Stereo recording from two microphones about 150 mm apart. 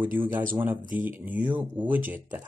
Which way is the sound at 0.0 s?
15° right (ahead or behind).